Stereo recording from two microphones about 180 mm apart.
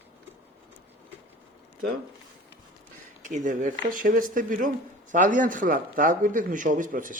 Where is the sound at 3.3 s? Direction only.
45° right (ahead or behind).